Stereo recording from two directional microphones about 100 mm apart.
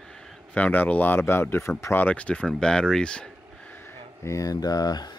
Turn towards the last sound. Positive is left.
turn(degrees=40)  # may be behind; listen again after turning